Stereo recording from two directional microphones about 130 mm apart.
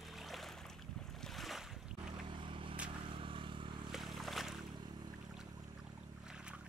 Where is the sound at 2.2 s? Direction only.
40° right (ahead or behind).